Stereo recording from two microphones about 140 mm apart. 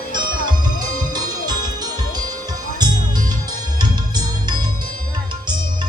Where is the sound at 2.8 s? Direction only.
30° right (ahead or behind).